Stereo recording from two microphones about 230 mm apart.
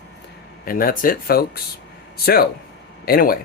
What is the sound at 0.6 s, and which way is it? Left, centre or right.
Speech, left.